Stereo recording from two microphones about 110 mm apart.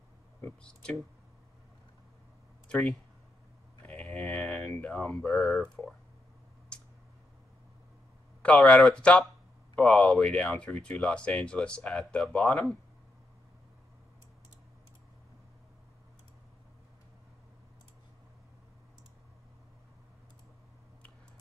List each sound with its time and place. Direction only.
0.7 s speech: 10° left (ahead or behind)
2.7 s speech: 5° left (ahead or behind)
3.8 s a sound: 15° left (ahead or behind)
5.8 s speech: 15° left (ahead or behind)
8.4 s speech: 10° left (ahead or behind)